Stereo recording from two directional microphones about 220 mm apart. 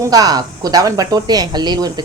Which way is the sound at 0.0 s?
15° right (ahead or behind).